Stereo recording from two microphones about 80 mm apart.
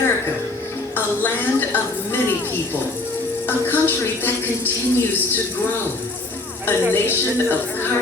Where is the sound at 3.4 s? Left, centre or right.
Left.